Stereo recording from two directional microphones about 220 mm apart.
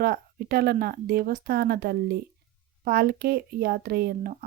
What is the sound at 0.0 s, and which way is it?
Speech, 45° right (ahead or behind).